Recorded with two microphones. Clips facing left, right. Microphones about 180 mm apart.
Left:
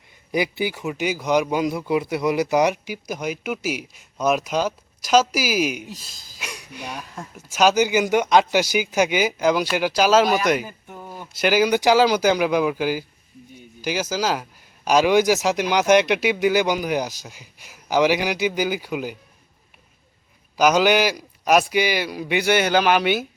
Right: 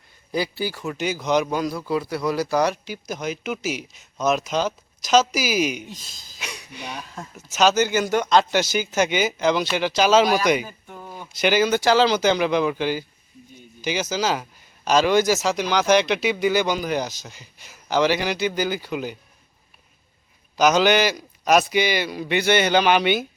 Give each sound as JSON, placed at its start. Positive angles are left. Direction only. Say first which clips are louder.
{"t": 0.3, "sound": "speech", "louder": "left 2 dB", "side_deg": 20}
{"t": 20.6, "sound": "speech", "louder": "even", "side_deg": 10}